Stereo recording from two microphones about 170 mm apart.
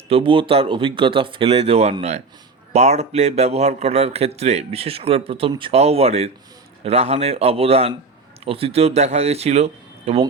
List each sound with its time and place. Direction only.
0.1 s speech: 30° right (ahead or behind)